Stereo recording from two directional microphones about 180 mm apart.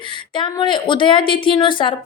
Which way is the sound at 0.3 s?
25° left (ahead or behind).